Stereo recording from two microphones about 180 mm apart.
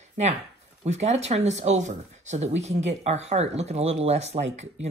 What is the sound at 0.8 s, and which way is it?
Speech, 40° right (ahead or behind).